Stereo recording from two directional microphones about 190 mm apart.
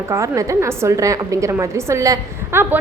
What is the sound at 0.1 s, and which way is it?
A woman's voice, 15° right (ahead or behind).